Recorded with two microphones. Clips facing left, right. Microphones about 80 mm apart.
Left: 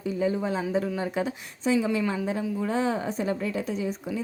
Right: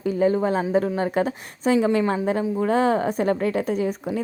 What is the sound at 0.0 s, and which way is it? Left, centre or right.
A woman's voice, right.